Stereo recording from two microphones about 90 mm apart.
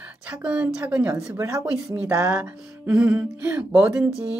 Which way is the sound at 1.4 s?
35° right (ahead or behind).